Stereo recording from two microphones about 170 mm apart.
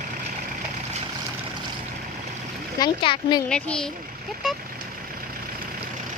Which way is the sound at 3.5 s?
5° left (ahead or behind).